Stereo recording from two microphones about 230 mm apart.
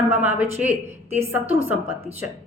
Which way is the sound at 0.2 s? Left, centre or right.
Centre.